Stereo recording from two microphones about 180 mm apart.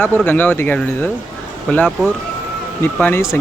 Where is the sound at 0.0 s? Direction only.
10° left (ahead or behind).